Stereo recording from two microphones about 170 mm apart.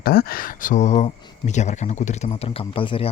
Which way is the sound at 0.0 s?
60° left (ahead or behind).